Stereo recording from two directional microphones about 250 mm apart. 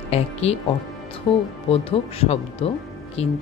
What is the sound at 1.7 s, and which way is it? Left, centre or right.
Speech, left.